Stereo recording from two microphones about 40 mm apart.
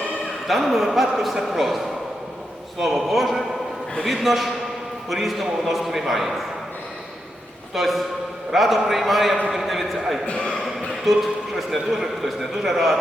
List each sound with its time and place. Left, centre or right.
0.4 s a man's voice: centre
2.8 s a man's voice: centre
7.8 s a man's voice: centre
9.5 s a sound: centre
10.2 s a sound: left
11.0 s a man's voice: centre